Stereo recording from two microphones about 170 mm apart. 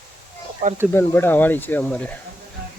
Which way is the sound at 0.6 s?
55° right (ahead or behind).